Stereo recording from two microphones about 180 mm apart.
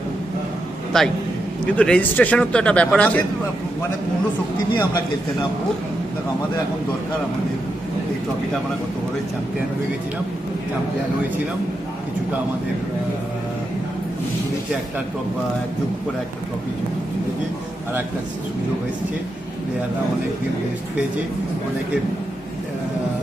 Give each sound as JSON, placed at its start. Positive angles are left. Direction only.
{"t": 0.9, "sound": "a man's voice", "side_deg": 5}
{"t": 4.8, "sound": "a man's voice", "side_deg": 25}